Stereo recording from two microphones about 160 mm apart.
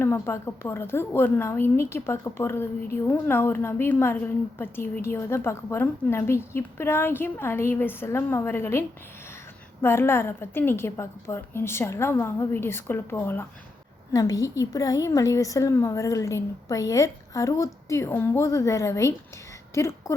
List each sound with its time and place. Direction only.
0.0 s a woman's voice: 15° left (ahead or behind)
9.8 s a woman's voice: 15° left (ahead or behind)